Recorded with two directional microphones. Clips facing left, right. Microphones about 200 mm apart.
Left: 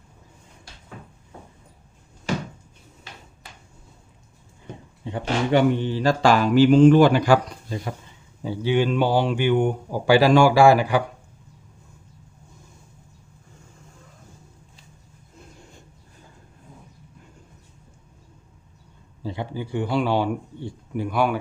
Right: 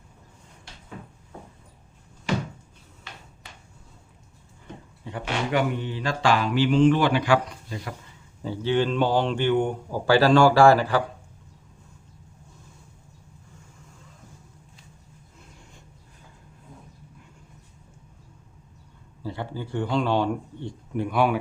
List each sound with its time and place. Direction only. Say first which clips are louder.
5.2 s speech: left 6 dB; 30° left (ahead or behind)
8.4 s speech: left 2 dB; 10° left (ahead or behind)
19.2 s speech: left 2 dB; 15° left (ahead or behind); by 21.3 s centre (ahead or behind)